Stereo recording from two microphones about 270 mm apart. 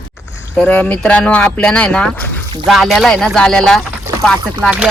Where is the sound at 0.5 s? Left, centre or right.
Centre.